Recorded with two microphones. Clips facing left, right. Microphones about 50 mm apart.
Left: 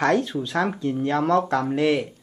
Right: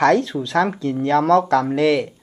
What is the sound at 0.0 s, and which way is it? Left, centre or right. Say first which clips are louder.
Speech: right 5 dB; right.